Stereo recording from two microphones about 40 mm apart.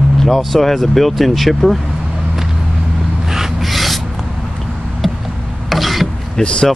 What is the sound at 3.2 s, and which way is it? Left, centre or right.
Rub, centre.